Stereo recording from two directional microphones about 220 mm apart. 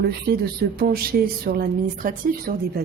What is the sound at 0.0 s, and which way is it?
A woman's voice, 45° right (ahead or behind).